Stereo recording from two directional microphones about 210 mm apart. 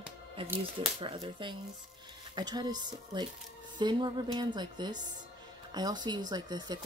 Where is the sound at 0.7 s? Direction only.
25° right (ahead or behind).